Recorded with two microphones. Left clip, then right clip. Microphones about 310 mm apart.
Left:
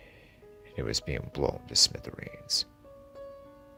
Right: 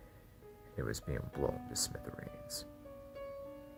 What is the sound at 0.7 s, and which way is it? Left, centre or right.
Speech, left.